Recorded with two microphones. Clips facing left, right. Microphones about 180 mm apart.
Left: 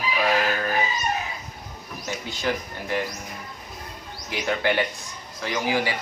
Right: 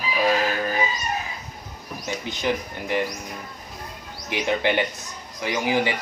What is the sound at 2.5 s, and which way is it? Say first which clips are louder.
Speech: right 2 dB; 15° right (ahead or behind).